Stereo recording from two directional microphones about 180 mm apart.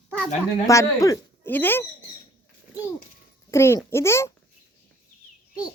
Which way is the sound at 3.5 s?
15° left (ahead or behind).